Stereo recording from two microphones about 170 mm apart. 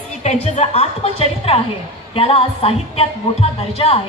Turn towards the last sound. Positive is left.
turn(degrees=35)  # may be behind; listen again after turning